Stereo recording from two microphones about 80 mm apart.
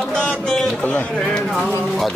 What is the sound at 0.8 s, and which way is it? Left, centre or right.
Speech, centre.